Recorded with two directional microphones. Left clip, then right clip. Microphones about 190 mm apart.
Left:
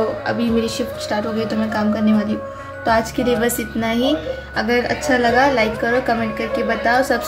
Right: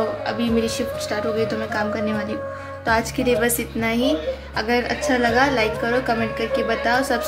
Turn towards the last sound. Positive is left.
turn(degrees=0)  # may be behind; listen again after turning